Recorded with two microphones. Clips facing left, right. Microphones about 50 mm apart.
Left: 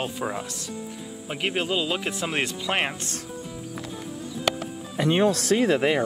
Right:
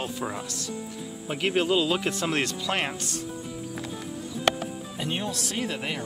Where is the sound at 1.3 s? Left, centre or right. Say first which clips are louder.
Right 2 dB; centre.